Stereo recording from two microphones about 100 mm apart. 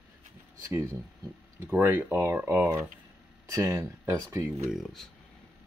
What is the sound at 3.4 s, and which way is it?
Speech, 30° right (ahead or behind).